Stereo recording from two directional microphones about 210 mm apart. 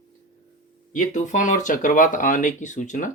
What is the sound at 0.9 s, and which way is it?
Speech, 35° left (ahead or behind).